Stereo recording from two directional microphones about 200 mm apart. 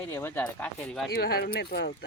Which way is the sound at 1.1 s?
50° left (ahead or behind).